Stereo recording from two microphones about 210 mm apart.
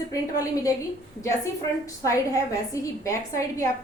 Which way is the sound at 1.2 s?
15° left (ahead or behind).